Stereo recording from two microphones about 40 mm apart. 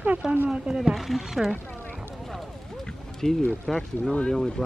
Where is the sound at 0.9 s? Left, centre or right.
Centre.